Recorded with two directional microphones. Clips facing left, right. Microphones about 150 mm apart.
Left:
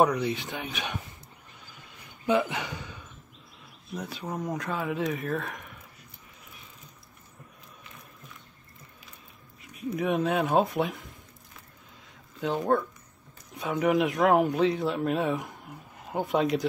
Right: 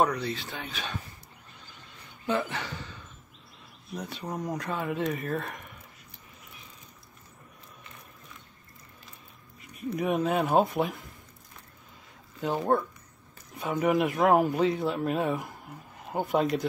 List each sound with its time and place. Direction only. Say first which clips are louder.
0.0 s speech: left 3 dB; 15° left (ahead or behind)
2.2 s speech: left 4 dB; 15° left (ahead or behind)
3.9 s speech: left 1 dB; centre (ahead or behind)
9.6 s speech: left 1 dB; centre (ahead or behind)
12.4 s speech: even; 5° right (ahead or behind)